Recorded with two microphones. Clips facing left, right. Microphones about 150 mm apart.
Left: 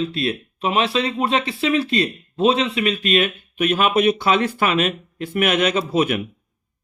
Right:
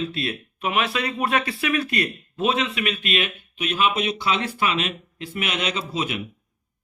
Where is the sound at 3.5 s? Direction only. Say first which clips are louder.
Left 5 dB; 50° left (ahead or behind).